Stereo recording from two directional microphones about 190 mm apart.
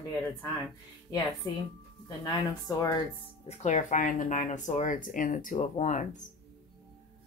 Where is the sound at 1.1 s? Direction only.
20° left (ahead or behind).